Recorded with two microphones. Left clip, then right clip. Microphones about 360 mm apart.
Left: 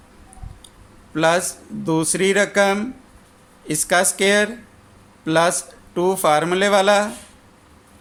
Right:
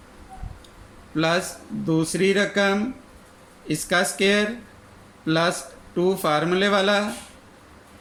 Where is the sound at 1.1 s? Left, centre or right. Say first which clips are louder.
Left 5 dB; centre.